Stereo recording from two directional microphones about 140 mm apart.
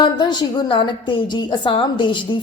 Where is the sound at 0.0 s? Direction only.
30° left (ahead or behind).